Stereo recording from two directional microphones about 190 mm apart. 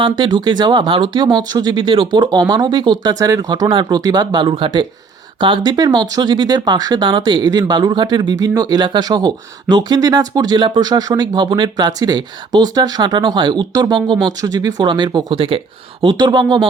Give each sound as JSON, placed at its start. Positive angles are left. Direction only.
{"t": 0.0, "sound": "speech", "side_deg": -25}